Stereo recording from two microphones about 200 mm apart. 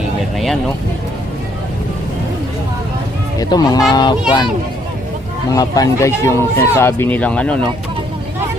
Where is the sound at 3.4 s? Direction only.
20° left (ahead or behind).